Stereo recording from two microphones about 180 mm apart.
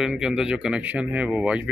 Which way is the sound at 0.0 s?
5° right (ahead or behind).